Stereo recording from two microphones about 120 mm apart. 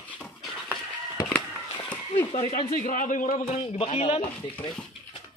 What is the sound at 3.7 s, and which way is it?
Speech, 55° left (ahead or behind).